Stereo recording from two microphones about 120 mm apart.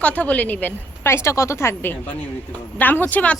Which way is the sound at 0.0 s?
10° left (ahead or behind).